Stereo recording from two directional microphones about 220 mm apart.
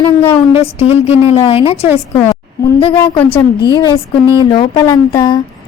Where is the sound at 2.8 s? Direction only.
25° left (ahead or behind).